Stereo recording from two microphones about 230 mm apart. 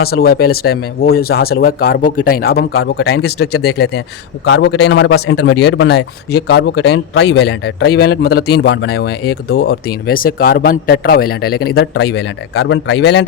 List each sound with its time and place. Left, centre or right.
0.0 s a man's voice: left